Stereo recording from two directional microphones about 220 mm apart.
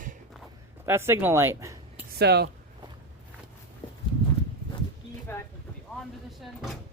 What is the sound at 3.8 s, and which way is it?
Horse, 20° left (ahead or behind).